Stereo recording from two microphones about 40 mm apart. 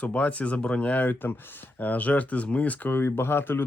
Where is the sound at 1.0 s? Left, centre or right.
Left.